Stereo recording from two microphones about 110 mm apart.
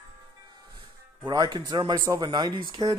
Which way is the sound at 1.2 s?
45° right (ahead or behind).